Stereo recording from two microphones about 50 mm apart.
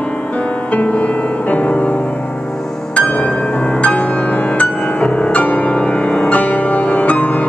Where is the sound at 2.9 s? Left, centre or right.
Left.